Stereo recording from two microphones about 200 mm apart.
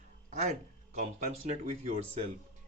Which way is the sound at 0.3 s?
35° right (ahead or behind).